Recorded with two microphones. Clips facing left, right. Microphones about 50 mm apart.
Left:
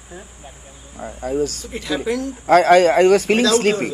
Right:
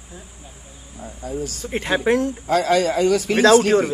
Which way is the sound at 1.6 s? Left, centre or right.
Right.